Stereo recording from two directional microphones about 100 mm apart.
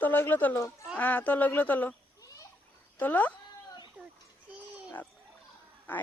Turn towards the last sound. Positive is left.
turn(degrees=20)  # may be behind; listen again after turning